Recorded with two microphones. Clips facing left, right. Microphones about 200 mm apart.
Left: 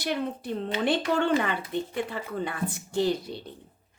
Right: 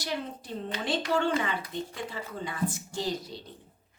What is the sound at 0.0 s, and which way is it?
Speech, 60° left (ahead or behind).